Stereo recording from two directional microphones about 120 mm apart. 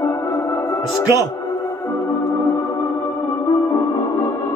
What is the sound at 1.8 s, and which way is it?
Music, 30° left (ahead or behind).